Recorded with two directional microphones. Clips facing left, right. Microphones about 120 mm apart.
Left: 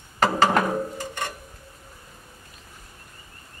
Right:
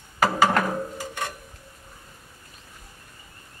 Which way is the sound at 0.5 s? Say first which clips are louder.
Left 2 dB; 5° left (ahead or behind).